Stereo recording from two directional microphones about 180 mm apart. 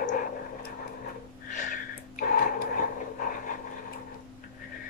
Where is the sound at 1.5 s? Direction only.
45° left (ahead or behind).